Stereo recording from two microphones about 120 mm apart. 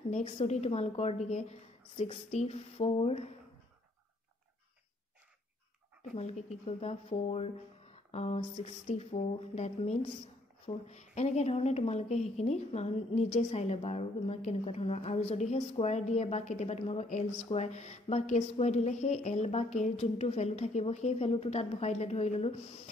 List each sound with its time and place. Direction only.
0.1 s a woman's voice: 65° left (ahead or behind)
6.1 s a woman's voice: 60° left (ahead or behind)